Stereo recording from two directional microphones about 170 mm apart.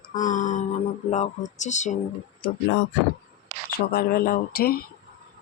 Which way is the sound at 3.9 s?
65° left (ahead or behind).